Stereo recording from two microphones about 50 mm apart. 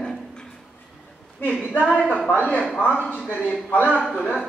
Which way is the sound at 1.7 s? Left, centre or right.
Left.